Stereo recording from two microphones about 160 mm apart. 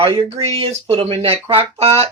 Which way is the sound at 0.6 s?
40° right (ahead or behind).